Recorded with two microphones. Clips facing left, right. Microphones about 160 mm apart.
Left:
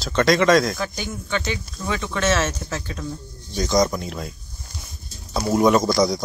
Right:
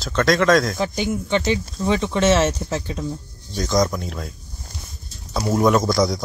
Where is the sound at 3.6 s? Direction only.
Centre (ahead or behind).